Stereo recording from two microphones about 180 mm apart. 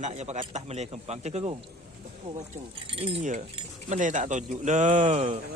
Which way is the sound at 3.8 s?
45° right (ahead or behind).